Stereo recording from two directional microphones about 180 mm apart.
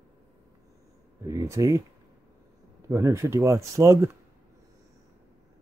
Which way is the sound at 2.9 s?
15° right (ahead or behind).